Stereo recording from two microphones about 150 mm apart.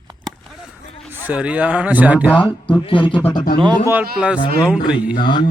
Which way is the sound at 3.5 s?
30° right (ahead or behind).